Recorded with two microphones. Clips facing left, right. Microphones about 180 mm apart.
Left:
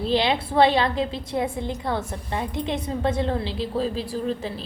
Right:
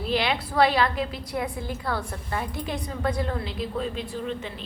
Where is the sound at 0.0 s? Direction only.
25° left (ahead or behind).